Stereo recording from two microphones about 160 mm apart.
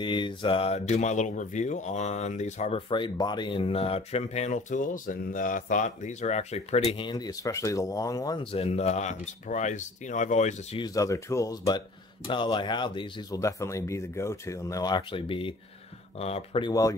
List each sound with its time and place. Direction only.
0.0 s speech: 30° left (ahead or behind)
2.9 s speech: 30° left (ahead or behind)
6.9 s speech: 30° left (ahead or behind)
8.5 s speech: 40° left (ahead or behind)
10.8 s speech: 20° left (ahead or behind)